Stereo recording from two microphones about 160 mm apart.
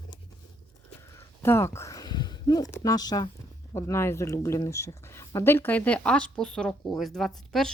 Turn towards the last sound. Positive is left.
turn(degrees=5)  # may be behind; listen again after turning